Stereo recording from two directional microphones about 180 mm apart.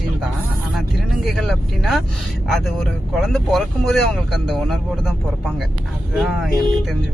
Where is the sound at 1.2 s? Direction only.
Centre (ahead or behind).